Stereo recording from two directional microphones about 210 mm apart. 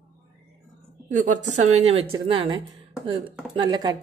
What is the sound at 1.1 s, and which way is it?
A woman's voice, 35° right (ahead or behind).